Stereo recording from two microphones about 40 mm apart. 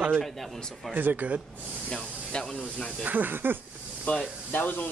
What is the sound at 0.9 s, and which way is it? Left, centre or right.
Speech, right.